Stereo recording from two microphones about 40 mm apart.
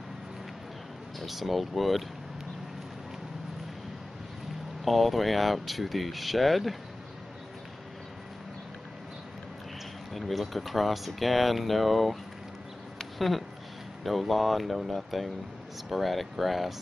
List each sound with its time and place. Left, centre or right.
1.2 s speech: centre
4.8 s speech: centre
10.1 s speech: centre
13.2 s speech: centre